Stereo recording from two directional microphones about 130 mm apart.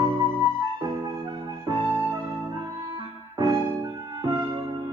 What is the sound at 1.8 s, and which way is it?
Music, 15° right (ahead or behind).